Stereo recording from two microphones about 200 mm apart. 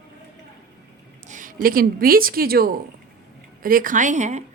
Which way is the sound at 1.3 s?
40° right (ahead or behind).